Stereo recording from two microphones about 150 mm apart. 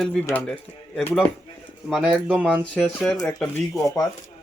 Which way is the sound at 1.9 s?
10° right (ahead or behind).